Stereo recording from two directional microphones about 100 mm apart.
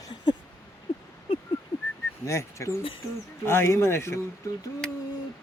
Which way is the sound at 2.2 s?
30° left (ahead or behind).